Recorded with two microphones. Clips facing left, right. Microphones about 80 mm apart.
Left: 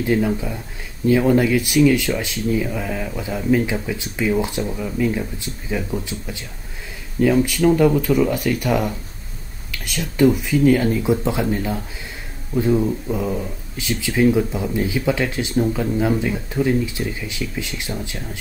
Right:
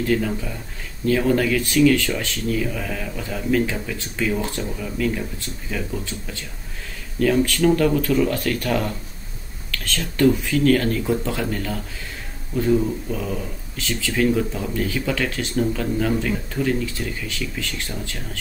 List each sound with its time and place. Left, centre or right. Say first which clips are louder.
0.0 s speech: left 3 dB; centre